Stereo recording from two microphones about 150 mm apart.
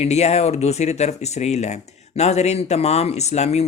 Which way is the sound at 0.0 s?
45° left (ahead or behind).